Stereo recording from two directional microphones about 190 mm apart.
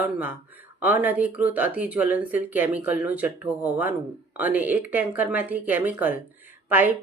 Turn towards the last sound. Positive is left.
turn(degrees=-10)  # may be behind; listen again after turning